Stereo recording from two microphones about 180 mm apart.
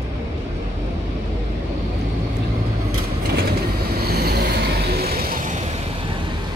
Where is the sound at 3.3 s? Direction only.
60° right (ahead or behind).